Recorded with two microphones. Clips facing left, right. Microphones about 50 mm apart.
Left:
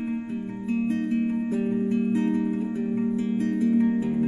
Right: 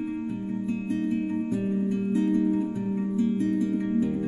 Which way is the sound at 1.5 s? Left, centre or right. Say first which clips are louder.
Left 2 dB; left.